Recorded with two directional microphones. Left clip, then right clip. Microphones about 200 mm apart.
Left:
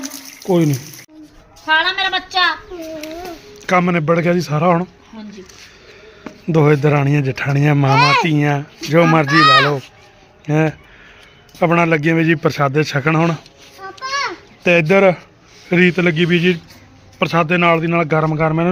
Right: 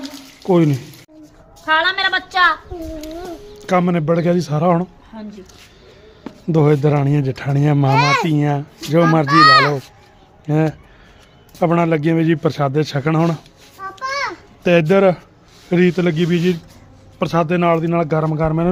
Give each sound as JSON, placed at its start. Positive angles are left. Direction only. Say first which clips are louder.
{"t": 0.0, "sound": "a sound", "louder": "left 1 dB", "side_deg": -10}
{"t": 1.6, "sound": "a woman's voice", "louder": "even", "side_deg": 15}
{"t": 3.7, "sound": "a man's voice", "louder": "left 2 dB", "side_deg": -5}
{"t": 6.5, "sound": "a man's voice", "louder": "left 2 dB", "side_deg": -5}
{"t": 7.9, "sound": "speech", "louder": "left 3 dB", "side_deg": -30}
{"t": 8.3, "sound": "a man's voice", "louder": "left 2 dB", "side_deg": -5}
{"t": 9.4, "sound": "speech", "louder": "right 2 dB", "side_deg": -30}
{"t": 10.4, "sound": "a man's voice", "louder": "left 2 dB", "side_deg": -10}
{"t": 14.6, "sound": "a man's voice", "louder": "left 1 dB", "side_deg": -15}
{"t": 15.7, "sound": "a man's voice", "louder": "left 2 dB", "side_deg": 0}